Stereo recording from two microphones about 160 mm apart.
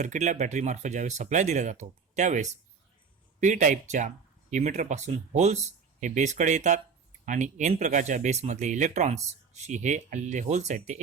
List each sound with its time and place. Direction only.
0.0 s speech: 50° right (ahead or behind)